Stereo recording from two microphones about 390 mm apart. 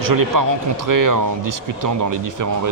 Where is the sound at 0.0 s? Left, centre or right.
Right.